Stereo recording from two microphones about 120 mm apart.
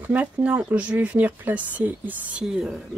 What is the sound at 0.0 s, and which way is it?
Speech, 15° right (ahead or behind).